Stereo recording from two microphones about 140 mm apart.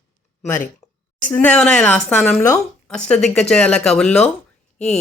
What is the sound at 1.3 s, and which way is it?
Speech, 10° left (ahead or behind).